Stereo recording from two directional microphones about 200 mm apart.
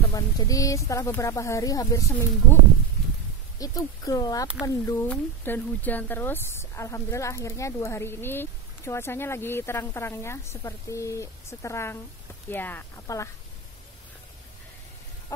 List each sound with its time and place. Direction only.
0.1 s speech: 15° left (ahead or behind)
3.5 s speech: 15° left (ahead or behind)